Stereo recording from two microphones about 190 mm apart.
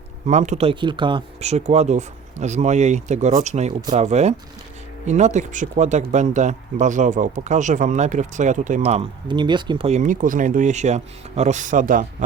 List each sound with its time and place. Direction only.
0.3 s speech: 40° right (ahead or behind)